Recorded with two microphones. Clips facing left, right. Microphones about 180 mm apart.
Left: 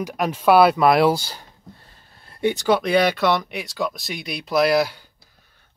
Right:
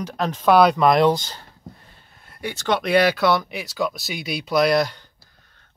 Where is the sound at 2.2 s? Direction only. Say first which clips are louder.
Left 9 dB; 25° left (ahead or behind).